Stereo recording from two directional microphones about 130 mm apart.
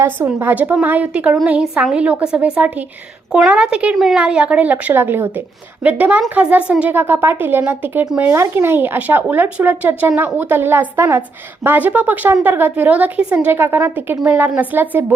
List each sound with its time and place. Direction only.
0.3 s speech: 15° right (ahead or behind)
8.3 s speech: 20° right (ahead or behind)